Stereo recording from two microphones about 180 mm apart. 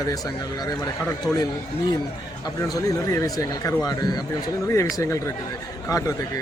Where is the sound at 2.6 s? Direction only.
20° left (ahead or behind).